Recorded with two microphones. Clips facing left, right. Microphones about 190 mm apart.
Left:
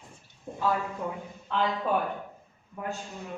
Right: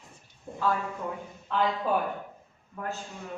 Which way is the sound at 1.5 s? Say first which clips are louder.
Right 1 dB; centre (ahead or behind).